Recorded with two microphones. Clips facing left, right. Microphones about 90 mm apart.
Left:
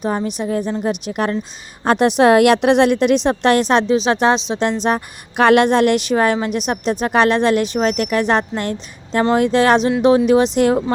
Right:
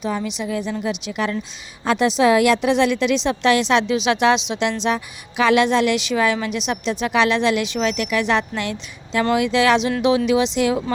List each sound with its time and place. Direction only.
0.0 s a woman's voice: 45° left (ahead or behind)